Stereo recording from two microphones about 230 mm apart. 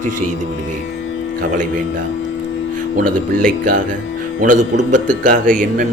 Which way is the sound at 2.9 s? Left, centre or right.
Right.